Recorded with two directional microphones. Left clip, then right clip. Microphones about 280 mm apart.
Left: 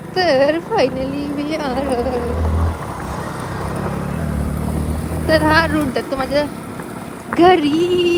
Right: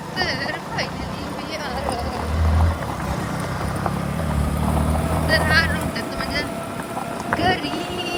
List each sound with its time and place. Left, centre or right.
0.2 s speech: centre
5.3 s speech: centre